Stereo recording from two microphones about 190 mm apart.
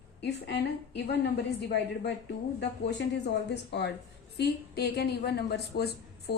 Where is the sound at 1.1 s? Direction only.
60° left (ahead or behind).